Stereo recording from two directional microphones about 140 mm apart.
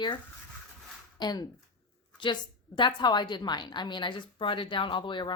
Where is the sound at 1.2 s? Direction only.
30° left (ahead or behind).